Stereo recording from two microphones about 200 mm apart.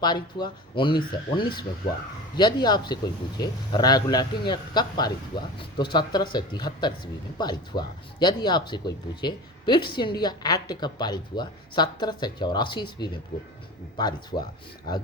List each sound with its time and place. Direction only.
0.0 s speech: 20° left (ahead or behind)